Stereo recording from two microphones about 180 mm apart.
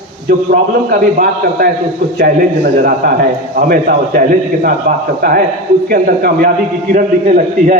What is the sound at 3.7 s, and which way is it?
Speech, 55° right (ahead or behind).